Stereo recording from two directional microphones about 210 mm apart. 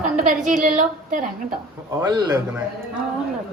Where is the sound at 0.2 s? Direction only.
40° right (ahead or behind).